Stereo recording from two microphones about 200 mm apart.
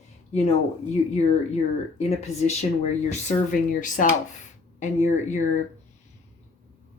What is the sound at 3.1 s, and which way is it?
Speech, 40° left (ahead or behind).